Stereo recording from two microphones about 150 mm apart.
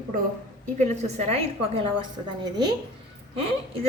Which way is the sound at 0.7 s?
50° right (ahead or behind).